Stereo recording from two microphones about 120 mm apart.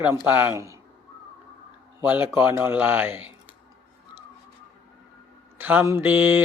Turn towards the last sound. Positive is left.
turn(degrees=-15)  # may be behind; listen again after turning